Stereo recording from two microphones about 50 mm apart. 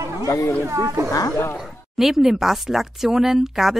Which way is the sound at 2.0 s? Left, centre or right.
Centre.